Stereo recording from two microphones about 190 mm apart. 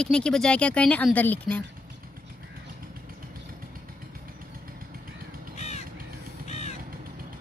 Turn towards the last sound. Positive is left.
turn(degrees=35)  # may be behind; listen again after turning